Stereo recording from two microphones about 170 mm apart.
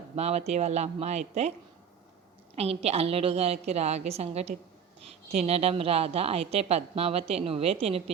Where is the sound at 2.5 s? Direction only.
35° right (ahead or behind).